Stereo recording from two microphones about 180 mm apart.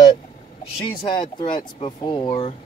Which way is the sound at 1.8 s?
30° left (ahead or behind).